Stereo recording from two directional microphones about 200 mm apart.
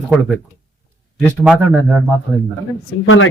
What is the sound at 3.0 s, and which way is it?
Speech, 90° left.